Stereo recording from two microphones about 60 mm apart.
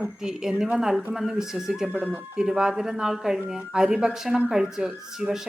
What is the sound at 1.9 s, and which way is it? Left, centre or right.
Speech, right.